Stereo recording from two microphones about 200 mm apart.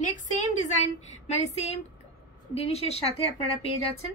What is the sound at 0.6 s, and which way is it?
A child's voice, 35° left (ahead or behind).